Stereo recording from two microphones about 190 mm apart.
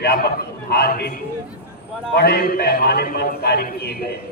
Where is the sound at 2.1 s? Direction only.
55° left (ahead or behind).